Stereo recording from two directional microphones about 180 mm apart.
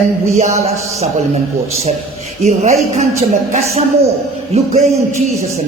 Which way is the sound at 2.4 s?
40° right (ahead or behind).